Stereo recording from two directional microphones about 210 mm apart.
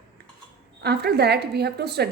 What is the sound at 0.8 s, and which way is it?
A woman's voice, 50° right (ahead or behind).